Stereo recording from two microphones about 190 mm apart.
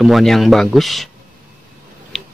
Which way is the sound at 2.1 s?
Centre (ahead or behind).